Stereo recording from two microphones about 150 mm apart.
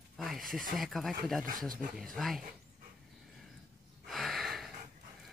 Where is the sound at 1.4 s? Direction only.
70° right (ahead or behind).